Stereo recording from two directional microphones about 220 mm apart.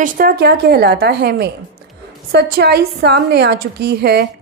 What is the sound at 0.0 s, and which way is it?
A woman's voice, 40° right (ahead or behind).